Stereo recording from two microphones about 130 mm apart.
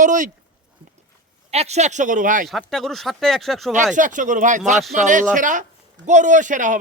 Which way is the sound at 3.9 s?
80° right.